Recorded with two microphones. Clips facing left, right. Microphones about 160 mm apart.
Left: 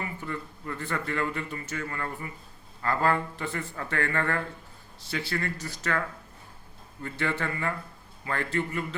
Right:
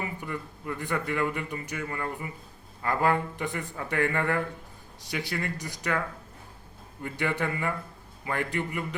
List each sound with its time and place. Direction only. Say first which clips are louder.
0.0 s speech: right 1 dB; 15° right (ahead or behind)
7.0 s speech: right 1 dB; 15° right (ahead or behind)